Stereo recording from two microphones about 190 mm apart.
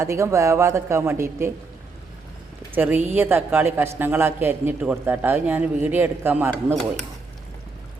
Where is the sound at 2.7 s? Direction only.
10° right (ahead or behind).